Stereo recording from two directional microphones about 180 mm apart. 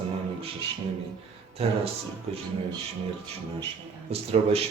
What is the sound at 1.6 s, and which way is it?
Speech, 35° right (ahead or behind).